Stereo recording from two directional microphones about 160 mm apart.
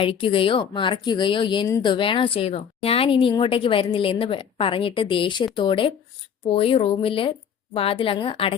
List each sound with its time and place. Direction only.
0.0 s speech: 35° left (ahead or behind)